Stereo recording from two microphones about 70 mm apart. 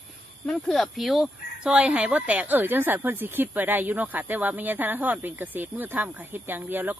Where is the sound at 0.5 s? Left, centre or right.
Centre.